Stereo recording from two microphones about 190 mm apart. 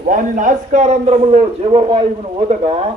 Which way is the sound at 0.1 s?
40° right (ahead or behind).